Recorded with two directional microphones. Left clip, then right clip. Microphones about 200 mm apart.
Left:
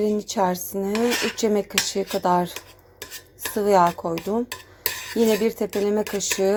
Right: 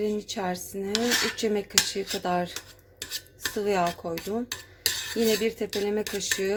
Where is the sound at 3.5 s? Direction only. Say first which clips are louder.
Left 8 dB; 15° left (ahead or behind).